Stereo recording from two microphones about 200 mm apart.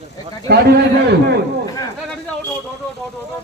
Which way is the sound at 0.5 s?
55° right (ahead or behind).